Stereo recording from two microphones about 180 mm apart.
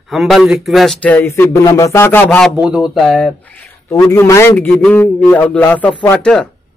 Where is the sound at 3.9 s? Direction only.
15° left (ahead or behind).